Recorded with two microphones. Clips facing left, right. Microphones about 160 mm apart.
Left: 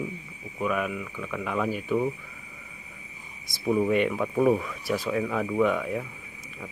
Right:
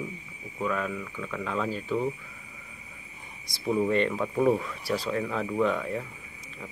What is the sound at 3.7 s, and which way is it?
Speech, 10° left (ahead or behind).